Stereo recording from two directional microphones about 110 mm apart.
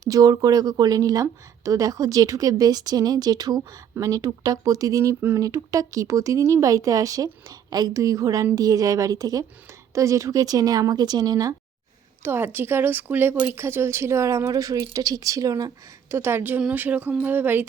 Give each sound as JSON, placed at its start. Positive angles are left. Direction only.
{"t": 0.0, "sound": "speech", "side_deg": -35}
{"t": 12.2, "sound": "speech", "side_deg": -20}